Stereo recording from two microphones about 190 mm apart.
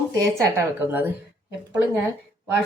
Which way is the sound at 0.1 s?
15° right (ahead or behind).